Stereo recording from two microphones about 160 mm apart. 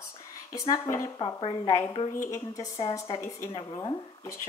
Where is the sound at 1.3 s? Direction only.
30° left (ahead or behind).